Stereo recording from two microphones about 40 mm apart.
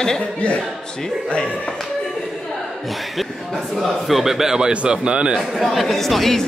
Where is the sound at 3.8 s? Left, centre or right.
Centre.